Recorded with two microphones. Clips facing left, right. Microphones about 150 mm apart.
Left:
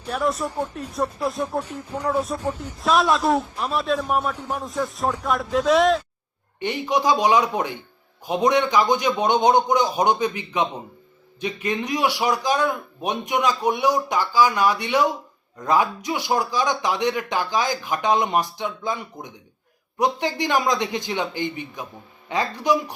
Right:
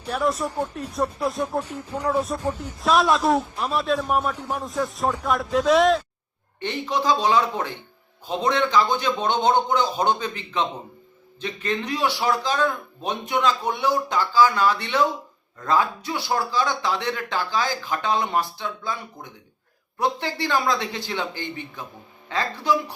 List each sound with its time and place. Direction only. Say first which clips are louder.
0.0 s a man's voice: even; 5° right (ahead or behind)
1.6 s speech: even; 10° right (ahead or behind)
2.1 s a man's voice: even; centre (ahead or behind)
6.6 s speech: left 3 dB; 15° left (ahead or behind)